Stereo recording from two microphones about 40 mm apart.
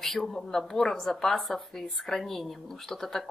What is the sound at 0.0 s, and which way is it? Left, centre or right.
Speech, centre.